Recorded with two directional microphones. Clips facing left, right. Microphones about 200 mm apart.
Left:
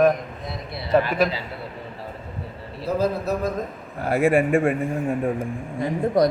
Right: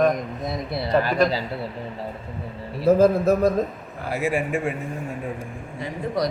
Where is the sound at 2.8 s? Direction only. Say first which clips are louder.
Right 7 dB; 50° right (ahead or behind).